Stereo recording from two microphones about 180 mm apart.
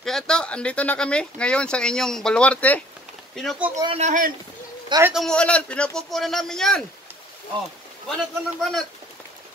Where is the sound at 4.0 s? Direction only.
45° right (ahead or behind).